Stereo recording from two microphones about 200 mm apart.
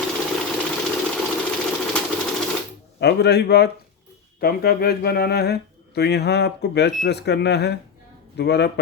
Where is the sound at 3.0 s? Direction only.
55° left (ahead or behind).